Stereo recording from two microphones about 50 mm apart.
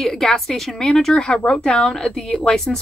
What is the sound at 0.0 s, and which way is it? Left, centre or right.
Speech, centre.